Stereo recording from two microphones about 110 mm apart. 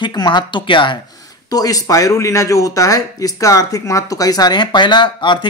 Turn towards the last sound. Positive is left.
turn(degrees=45)  # may be behind; listen again after turning